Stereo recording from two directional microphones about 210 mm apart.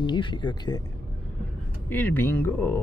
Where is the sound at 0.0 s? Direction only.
20° left (ahead or behind).